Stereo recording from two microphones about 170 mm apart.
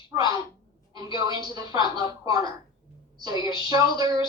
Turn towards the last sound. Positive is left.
turn(degrees=-20)  # may be behind; listen again after turning